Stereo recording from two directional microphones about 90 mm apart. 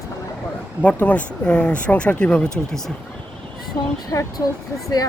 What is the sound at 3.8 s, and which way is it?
Speech, 35° left (ahead or behind).